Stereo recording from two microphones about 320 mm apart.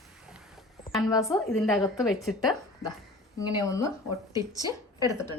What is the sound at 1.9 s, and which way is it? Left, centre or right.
Speech, centre.